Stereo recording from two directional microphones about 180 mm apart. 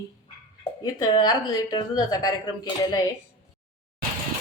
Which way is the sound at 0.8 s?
20° left (ahead or behind).